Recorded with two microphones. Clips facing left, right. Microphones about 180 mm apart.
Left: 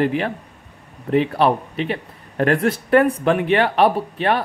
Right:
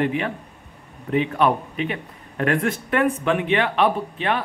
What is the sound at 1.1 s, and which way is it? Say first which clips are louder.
Speech: left 3 dB; 35° left (ahead or behind).